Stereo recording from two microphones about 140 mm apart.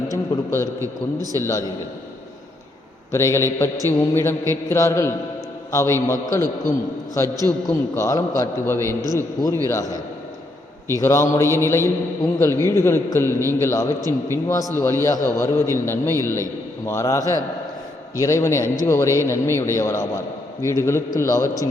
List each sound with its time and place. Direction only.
0.1 s a man's voice: 25° left (ahead or behind)
0.8 s a man's voice: 25° right (ahead or behind)
1.4 s a man's voice: 20° left (ahead or behind)
3.1 s a man's voice: 20° left (ahead or behind)
11.0 s a man's voice: 20° left (ahead or behind)